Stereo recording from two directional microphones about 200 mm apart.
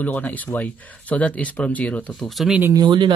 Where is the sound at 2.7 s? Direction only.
25° right (ahead or behind).